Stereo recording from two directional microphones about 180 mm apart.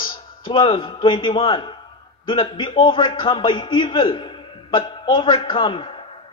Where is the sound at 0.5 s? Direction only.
25° left (ahead or behind).